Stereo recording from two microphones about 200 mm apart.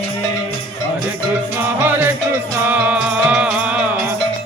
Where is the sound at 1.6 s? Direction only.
10° right (ahead or behind).